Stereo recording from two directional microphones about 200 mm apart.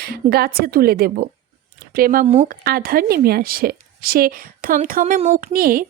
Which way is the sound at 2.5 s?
50° right (ahead or behind).